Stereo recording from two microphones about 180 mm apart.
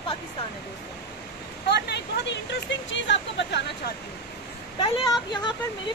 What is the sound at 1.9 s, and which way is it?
Speech, 80° left.